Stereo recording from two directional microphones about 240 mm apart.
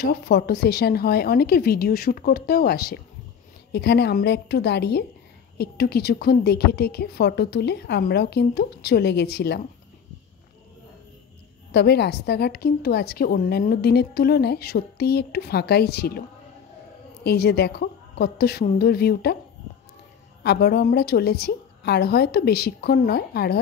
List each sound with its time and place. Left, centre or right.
0.0 s a woman's voice: left
11.7 s a woman's voice: left
17.2 s a woman's voice: left
20.4 s a woman's voice: left